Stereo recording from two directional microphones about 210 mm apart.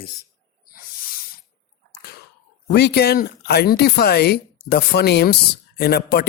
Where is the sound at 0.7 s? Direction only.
45° left (ahead or behind).